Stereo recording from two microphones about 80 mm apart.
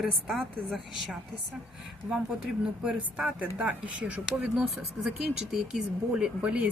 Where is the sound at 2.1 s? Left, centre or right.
Centre.